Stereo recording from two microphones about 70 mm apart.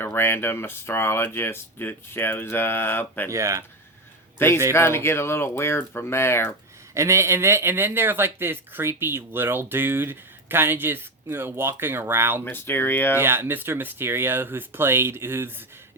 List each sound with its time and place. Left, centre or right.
0.0 s speech: left
3.2 s speech: right
4.4 s speech: left
6.9 s speech: right
12.5 s speech: left
13.1 s speech: right